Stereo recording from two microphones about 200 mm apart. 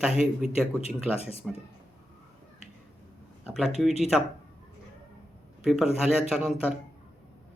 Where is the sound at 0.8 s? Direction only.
30° left (ahead or behind).